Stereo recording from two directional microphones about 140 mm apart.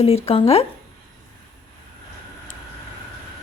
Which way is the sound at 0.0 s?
45° left (ahead or behind).